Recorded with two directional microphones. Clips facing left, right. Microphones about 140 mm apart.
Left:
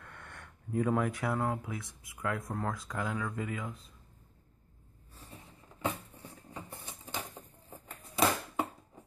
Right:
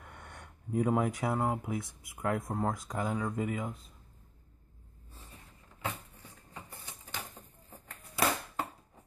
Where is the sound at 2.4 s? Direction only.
20° right (ahead or behind).